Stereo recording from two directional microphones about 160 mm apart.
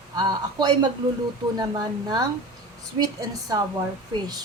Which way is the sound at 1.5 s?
25° right (ahead or behind).